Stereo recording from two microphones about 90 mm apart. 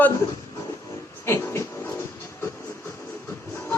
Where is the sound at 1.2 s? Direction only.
30° left (ahead or behind).